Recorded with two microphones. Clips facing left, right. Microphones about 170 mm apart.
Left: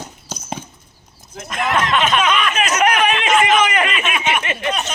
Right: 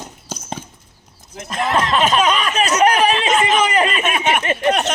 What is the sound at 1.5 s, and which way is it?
A man's voice, 35° right (ahead or behind).